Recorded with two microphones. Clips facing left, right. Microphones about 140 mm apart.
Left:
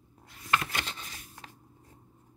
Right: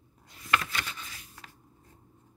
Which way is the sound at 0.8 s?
20° left (ahead or behind).